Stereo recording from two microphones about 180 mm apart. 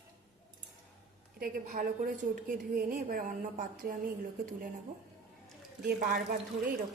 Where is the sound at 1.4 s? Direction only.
55° right (ahead or behind).